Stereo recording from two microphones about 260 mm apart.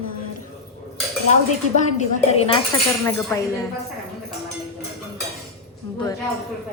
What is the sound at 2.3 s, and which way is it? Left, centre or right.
Speech, left.